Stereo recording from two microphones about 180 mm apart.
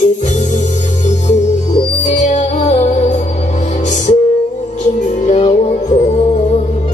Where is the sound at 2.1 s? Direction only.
45° left (ahead or behind).